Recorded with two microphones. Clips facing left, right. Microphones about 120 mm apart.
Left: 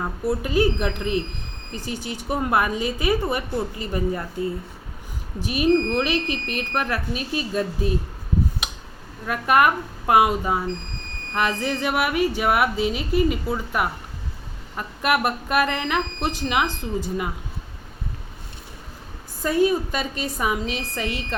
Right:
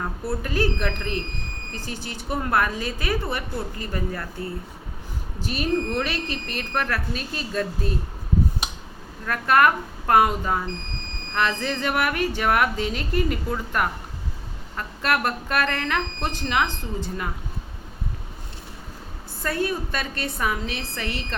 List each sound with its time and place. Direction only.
0.0 s speech: 15° left (ahead or behind)
9.2 s speech: 15° left (ahead or behind)
19.4 s speech: 15° left (ahead or behind)